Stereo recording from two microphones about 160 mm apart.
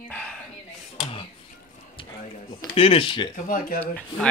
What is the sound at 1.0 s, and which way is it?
Speech, 35° left (ahead or behind).